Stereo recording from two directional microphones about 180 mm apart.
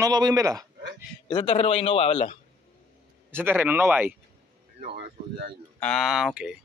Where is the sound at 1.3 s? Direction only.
30° left (ahead or behind).